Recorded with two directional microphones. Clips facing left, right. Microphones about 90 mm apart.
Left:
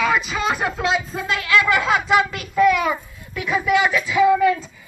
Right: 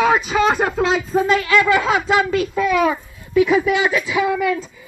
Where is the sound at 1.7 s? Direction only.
25° right (ahead or behind).